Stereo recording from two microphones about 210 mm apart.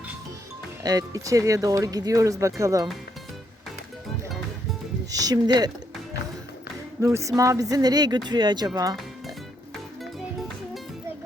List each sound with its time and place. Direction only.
0.8 s speech: 15° right (ahead or behind)
5.1 s speech: 20° right (ahead or behind)
7.0 s speech: 15° right (ahead or behind)